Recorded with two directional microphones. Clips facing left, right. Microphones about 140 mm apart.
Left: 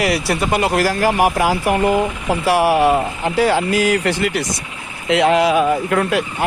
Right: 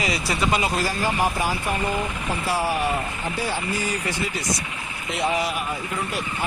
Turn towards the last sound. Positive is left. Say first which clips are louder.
# left 11 dB
turn(degrees=90)